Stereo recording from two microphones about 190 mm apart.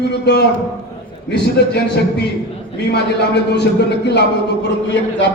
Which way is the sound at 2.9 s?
60° left (ahead or behind).